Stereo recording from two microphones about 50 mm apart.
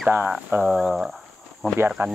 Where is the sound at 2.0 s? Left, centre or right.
Right.